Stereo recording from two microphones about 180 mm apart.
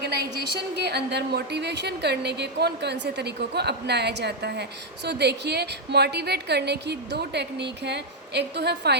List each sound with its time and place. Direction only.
0.0 s a woman's voice: 65° right (ahead or behind)